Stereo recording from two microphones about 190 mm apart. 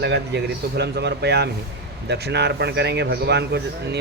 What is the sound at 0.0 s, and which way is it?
A man's voice, 60° right (ahead or behind).